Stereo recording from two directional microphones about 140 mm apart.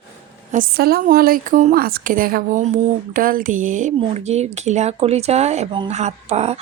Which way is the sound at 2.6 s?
50° right (ahead or behind).